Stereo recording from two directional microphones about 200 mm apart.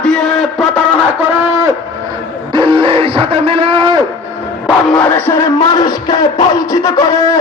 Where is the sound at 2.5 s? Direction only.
25° right (ahead or behind).